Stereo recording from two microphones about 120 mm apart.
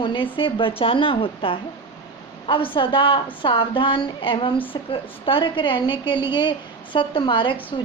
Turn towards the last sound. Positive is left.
turn(degrees=45)  # may be behind; listen again after turning